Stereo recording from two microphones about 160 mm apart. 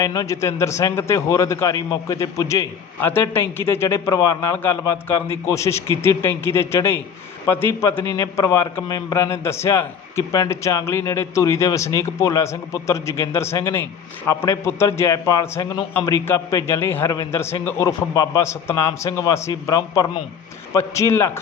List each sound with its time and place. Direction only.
0.0 s a man's voice: 20° left (ahead or behind)